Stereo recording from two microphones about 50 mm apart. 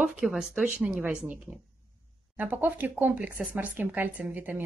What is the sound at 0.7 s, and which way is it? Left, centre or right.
Speech, right.